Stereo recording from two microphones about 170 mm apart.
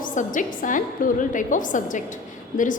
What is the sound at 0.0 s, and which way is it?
A woman's voice, 50° left (ahead or behind).